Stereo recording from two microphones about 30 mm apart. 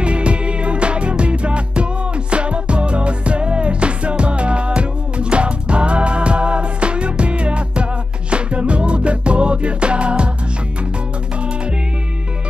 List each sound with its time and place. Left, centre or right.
0.0 s music: right